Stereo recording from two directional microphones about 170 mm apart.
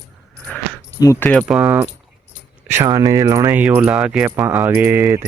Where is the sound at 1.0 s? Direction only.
15° left (ahead or behind).